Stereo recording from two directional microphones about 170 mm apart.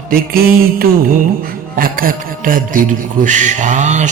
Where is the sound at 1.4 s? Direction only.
55° right (ahead or behind).